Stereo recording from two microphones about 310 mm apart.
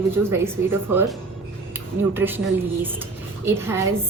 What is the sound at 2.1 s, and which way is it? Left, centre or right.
Speech, centre.